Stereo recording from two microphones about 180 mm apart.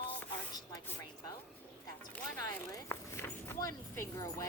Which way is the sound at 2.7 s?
15° left (ahead or behind).